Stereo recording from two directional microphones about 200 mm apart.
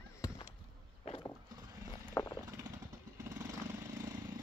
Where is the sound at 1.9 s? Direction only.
25° left (ahead or behind).